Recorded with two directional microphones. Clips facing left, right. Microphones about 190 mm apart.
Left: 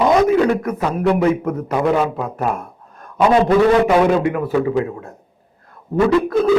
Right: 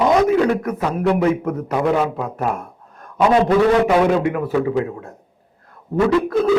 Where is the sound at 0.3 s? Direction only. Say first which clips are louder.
Left 1 dB; 15° left (ahead or behind).